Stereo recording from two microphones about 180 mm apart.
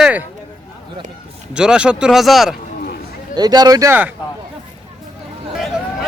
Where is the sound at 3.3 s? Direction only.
20° right (ahead or behind).